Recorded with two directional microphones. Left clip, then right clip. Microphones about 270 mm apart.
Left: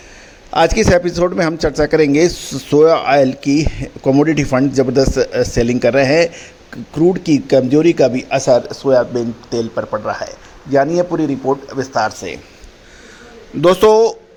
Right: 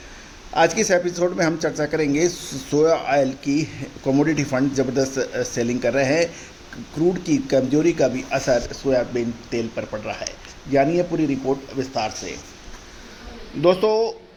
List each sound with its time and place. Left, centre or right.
0.5 s a man's voice: left
9.7 s a man's voice: centre
11.3 s speech: centre
12.0 s a man's voice: left
13.6 s a man's voice: left